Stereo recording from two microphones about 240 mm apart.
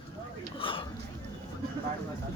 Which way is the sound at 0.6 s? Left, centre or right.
Left.